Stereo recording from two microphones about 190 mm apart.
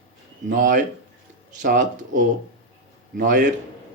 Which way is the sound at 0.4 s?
45° right (ahead or behind).